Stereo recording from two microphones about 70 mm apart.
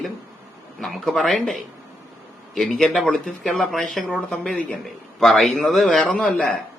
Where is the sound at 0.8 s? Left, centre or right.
Centre.